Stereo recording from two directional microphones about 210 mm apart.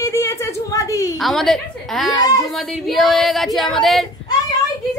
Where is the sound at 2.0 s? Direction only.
15° left (ahead or behind).